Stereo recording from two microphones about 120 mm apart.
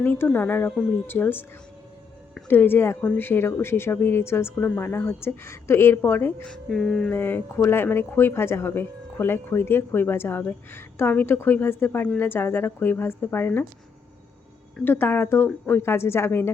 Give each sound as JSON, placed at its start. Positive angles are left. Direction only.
{"t": 0.0, "sound": "speech", "side_deg": 15}
{"t": 2.5, "sound": "speech", "side_deg": 20}
{"t": 6.5, "sound": "speech", "side_deg": 5}
{"t": 7.1, "sound": "speech", "side_deg": 15}
{"t": 14.8, "sound": "speech", "side_deg": 15}